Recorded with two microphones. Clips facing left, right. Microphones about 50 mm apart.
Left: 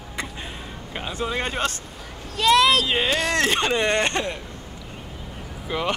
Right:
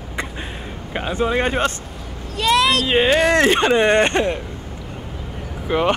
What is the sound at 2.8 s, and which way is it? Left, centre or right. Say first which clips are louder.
Speech: right 7 dB; right.